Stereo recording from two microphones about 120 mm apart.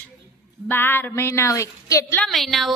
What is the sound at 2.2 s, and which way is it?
Speech, centre (ahead or behind).